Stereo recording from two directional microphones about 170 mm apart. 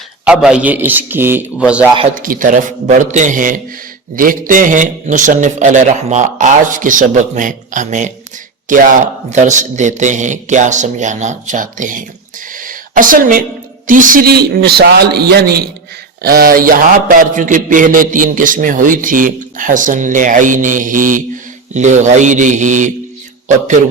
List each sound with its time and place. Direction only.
0.3 s a man's voice: 5° right (ahead or behind)
2.1 s a man's voice: 50° right (ahead or behind)
12.5 s a sound: 55° right (ahead or behind)
13.8 s a man's voice: 50° right (ahead or behind)